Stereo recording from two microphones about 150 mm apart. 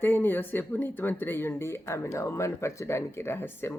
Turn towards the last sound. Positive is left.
turn(degrees=15)  # may be behind; listen again after turning